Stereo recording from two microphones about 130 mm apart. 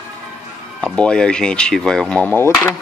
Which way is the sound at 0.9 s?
5° left (ahead or behind).